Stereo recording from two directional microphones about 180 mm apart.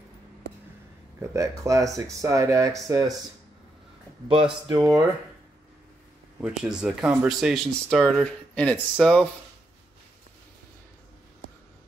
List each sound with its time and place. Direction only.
1.2 s speech: 15° right (ahead or behind)
4.3 s speech: 20° right (ahead or behind)
6.4 s speech: 5° right (ahead or behind)